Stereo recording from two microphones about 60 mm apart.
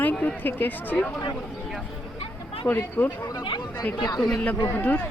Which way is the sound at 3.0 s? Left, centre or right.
Left.